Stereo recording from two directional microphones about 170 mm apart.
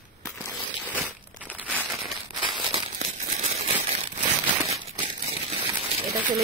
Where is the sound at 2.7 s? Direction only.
45° right (ahead or behind).